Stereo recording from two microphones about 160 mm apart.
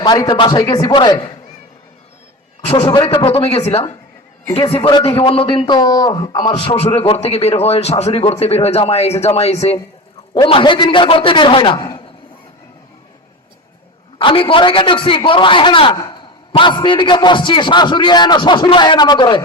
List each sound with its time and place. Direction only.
0.0 s a man's voice: 25° left (ahead or behind)
2.7 s a man's voice: 30° left (ahead or behind)
4.9 s a man's voice: 30° left (ahead or behind)
14.2 s a man's voice: 35° left (ahead or behind)